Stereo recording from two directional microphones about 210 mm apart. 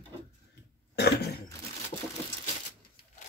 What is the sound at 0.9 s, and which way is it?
Cough, 50° left (ahead or behind).